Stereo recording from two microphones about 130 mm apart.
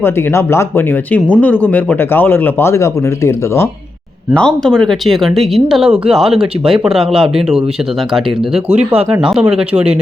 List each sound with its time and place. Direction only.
0.0 s speech: 20° left (ahead or behind)
4.4 s speech: 5° left (ahead or behind)
8.7 s speech: 55° right (ahead or behind)
9.2 s speech: 5° right (ahead or behind)